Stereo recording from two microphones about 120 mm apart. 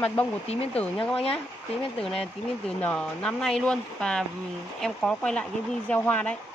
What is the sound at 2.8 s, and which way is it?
Speech, 10° left (ahead or behind).